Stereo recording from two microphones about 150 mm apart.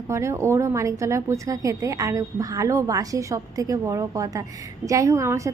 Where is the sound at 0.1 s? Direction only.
20° right (ahead or behind).